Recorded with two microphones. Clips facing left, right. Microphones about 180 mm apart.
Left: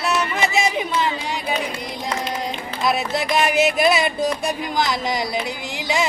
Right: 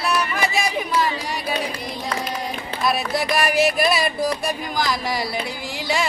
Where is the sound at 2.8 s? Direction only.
20° left (ahead or behind).